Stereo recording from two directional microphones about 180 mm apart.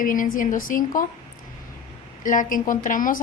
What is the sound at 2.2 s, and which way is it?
Speech, 45° left (ahead or behind).